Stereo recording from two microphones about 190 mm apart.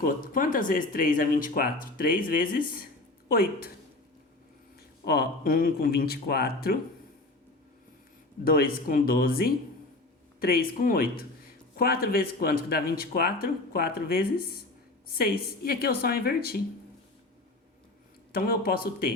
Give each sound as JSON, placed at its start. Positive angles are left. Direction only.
{"t": 0.0, "sound": "speech", "side_deg": 45}
{"t": 5.0, "sound": "speech", "side_deg": 55}
{"t": 8.4, "sound": "speech", "side_deg": 50}
{"t": 18.3, "sound": "speech", "side_deg": 50}